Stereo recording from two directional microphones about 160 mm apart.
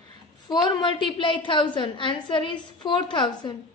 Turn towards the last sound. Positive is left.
turn(degrees=30)  # may be behind; listen again after turning